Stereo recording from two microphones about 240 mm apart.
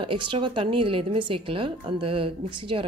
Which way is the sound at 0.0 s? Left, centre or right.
Right.